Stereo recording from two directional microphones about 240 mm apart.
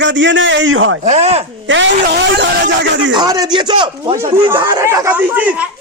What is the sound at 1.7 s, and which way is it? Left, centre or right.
A man's voice, right.